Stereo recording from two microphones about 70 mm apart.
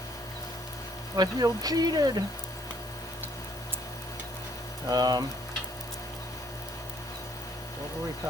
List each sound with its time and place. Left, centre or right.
1.1 s speech: right
4.9 s speech: right